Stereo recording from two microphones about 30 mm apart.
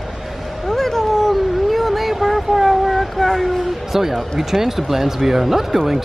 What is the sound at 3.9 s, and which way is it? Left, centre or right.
Speech, centre.